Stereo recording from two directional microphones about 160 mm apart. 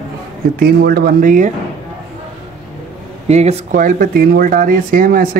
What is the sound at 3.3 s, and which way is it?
Speech, 40° right (ahead or behind).